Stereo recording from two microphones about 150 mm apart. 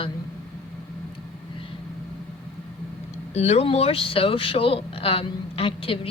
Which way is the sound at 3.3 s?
45° left (ahead or behind).